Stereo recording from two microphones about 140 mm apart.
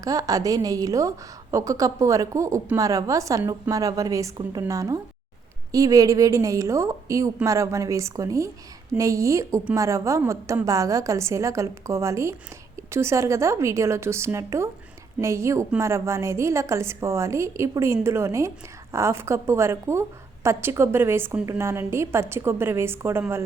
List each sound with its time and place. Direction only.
0.0 s a woman's voice: 25° right (ahead or behind)